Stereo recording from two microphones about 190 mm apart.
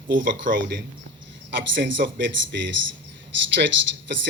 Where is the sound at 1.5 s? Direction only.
70° right (ahead or behind).